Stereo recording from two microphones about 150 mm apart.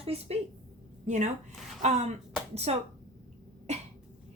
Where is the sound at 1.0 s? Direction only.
50° right (ahead or behind).